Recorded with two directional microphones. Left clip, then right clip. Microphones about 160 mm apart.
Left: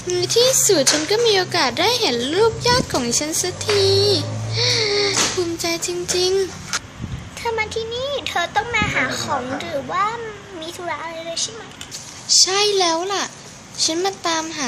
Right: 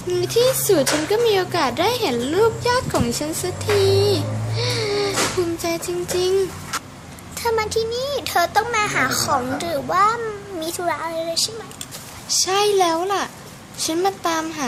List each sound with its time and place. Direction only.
0.1 s a child's voice: 5° right (ahead or behind)
7.4 s a child's voice: 35° right (ahead or behind)
12.3 s a child's voice: centre (ahead or behind)